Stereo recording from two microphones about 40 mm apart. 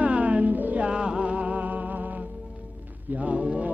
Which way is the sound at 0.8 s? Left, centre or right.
Right.